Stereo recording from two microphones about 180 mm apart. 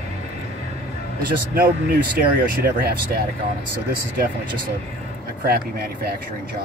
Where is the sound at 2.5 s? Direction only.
55° right (ahead or behind).